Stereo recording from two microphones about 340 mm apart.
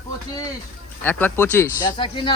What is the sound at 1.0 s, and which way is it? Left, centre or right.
A man's voice, centre.